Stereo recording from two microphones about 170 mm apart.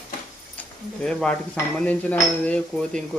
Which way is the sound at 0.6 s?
5° left (ahead or behind).